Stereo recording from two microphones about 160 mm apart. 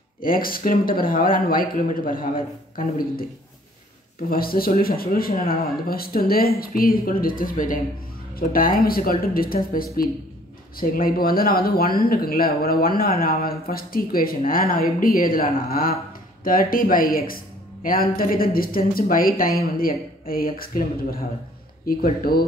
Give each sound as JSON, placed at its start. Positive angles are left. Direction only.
{"t": 0.2, "sound": "speech", "side_deg": 60}
{"t": 4.3, "sound": "speech", "side_deg": 65}